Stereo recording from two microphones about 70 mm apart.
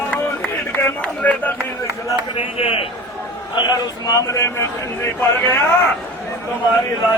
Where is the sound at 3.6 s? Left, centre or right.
Left.